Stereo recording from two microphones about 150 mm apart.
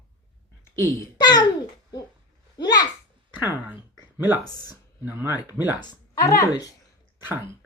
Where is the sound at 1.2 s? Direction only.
25° left (ahead or behind).